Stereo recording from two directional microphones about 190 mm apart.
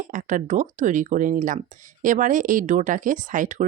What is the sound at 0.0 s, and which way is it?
Speech, 45° right (ahead or behind).